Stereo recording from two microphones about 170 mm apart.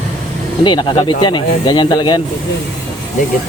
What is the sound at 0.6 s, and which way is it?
Speech, 25° left (ahead or behind).